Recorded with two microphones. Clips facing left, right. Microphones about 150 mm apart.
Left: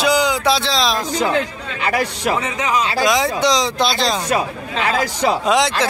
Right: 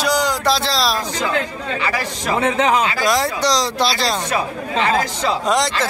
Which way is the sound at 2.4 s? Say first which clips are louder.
Right 4 dB; 60° right (ahead or behind).